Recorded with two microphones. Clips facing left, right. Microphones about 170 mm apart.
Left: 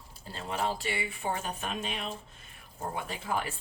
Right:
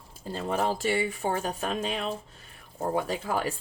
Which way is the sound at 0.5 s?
45° right (ahead or behind).